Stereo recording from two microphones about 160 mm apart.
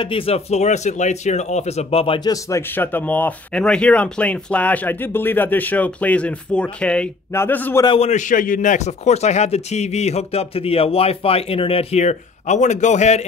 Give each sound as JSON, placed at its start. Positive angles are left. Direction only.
{"t": 0.0, "sound": "speech", "side_deg": 35}
{"t": 7.8, "sound": "a man's voice", "side_deg": 30}
{"t": 8.1, "sound": "speech", "side_deg": 50}